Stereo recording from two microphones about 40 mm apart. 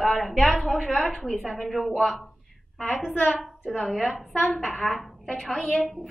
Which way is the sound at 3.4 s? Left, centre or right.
Centre.